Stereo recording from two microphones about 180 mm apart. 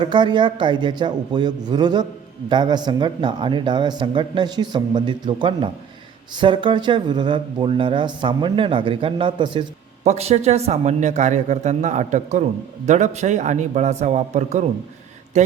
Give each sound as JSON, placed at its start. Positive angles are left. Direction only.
{"t": 0.0, "sound": "speech", "side_deg": -25}
{"t": 10.0, "sound": "a man's voice", "side_deg": -35}